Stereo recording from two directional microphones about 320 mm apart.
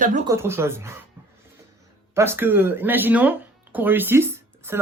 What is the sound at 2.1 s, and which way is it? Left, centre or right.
Speech, centre.